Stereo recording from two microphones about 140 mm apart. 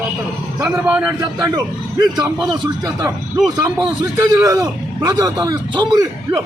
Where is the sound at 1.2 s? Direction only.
30° right (ahead or behind).